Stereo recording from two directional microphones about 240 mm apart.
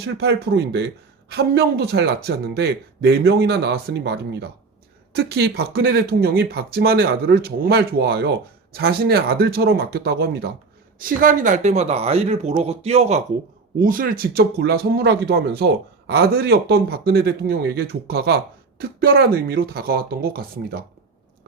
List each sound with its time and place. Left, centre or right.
0.0 s speech: right